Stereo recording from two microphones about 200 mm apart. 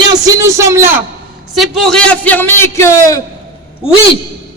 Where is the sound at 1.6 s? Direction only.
Centre (ahead or behind).